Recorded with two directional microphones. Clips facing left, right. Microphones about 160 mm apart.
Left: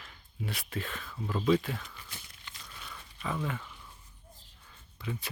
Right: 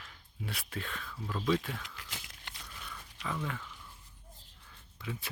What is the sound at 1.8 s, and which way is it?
Speech, 90° right.